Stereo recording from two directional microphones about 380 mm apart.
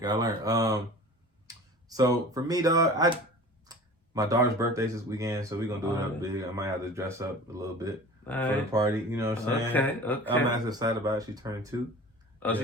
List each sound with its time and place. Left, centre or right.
0.0 s speech: centre
8.3 s a man's voice: centre
8.7 s speech: centre
9.7 s a man's voice: centre
10.4 s speech: centre
12.4 s speech: centre